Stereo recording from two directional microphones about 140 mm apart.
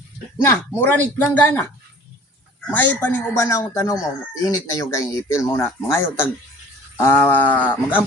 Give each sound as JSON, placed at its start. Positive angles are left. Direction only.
{"t": 0.4, "sound": "speech", "side_deg": 15}
{"t": 2.6, "sound": "speech", "side_deg": 10}